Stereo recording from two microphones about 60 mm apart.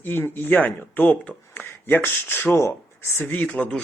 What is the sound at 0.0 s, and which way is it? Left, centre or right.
Speech, left.